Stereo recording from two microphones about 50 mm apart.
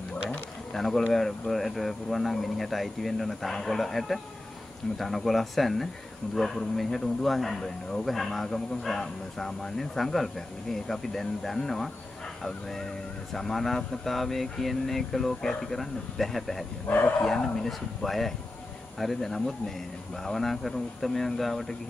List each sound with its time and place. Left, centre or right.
0.7 s speech: centre
16.8 s speech: left
17.2 s speech: centre